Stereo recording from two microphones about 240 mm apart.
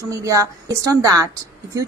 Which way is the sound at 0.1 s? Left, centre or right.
Centre.